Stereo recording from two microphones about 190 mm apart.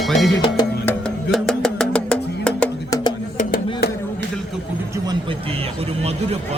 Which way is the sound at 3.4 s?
50° left (ahead or behind).